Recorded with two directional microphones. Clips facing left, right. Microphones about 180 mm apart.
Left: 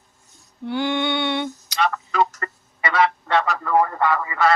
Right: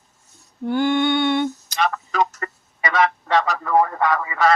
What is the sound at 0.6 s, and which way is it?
Female singing, 50° right (ahead or behind).